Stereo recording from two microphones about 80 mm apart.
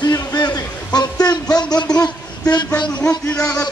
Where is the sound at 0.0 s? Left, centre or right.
Left.